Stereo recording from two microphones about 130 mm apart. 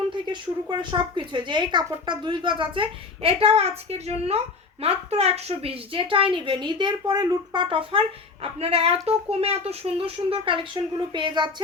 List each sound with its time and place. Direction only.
0.1 s a woman's voice: 35° right (ahead or behind)